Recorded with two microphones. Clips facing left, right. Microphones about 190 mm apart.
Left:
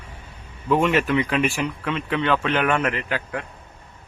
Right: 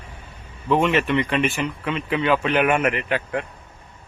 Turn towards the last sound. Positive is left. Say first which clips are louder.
# right 3 dB
turn(degrees=-20)  # may be behind; listen again after turning